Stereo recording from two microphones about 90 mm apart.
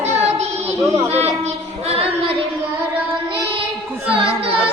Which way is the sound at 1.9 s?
90° right.